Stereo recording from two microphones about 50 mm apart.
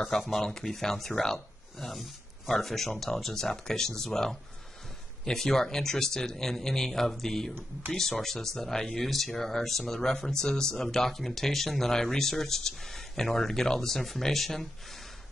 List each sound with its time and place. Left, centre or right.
0.0 s speech: centre